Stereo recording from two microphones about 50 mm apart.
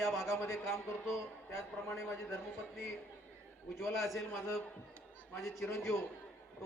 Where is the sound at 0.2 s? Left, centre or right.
Left.